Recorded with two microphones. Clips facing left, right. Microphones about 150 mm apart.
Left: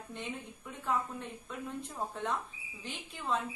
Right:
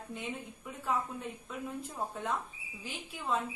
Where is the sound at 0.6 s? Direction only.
5° right (ahead or behind).